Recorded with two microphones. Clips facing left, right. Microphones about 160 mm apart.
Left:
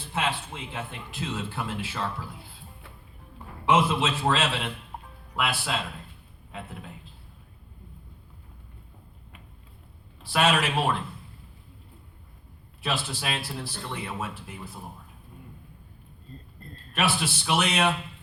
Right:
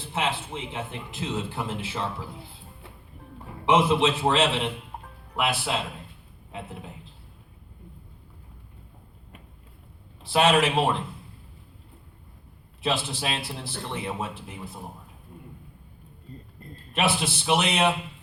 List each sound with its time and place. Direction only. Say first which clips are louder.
0.1 s a man's voice: right 1 dB; 25° right (ahead or behind)
3.7 s a man's voice: right 2 dB; 20° right (ahead or behind)
10.2 s a man's voice: right 3 dB; 20° right (ahead or behind)
12.8 s a man's voice: right 3 dB; 25° right (ahead or behind)
16.3 s a man's voice: right 2 dB; 15° right (ahead or behind)